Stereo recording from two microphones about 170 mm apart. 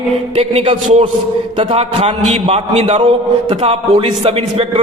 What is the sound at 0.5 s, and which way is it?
A man's voice, 35° right (ahead or behind).